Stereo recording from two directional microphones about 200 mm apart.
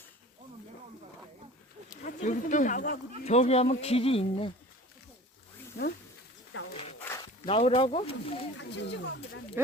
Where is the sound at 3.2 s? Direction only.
30° left (ahead or behind).